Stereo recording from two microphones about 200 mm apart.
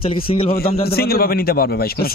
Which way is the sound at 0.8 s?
50° left (ahead or behind).